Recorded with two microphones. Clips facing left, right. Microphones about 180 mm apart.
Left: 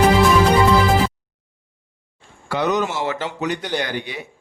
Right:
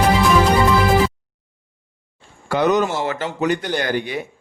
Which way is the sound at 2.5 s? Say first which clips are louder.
Right 3 dB; 50° right (ahead or behind).